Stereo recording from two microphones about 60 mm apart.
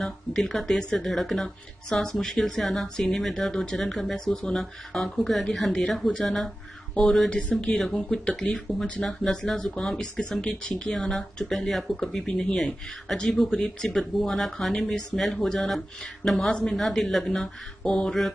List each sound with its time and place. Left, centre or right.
0.0 s speech: centre
11.0 s speech: centre
16.7 s speech: centre